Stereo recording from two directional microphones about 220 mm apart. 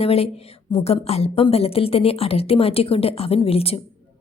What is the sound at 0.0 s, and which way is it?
A woman's voice, 25° left (ahead or behind).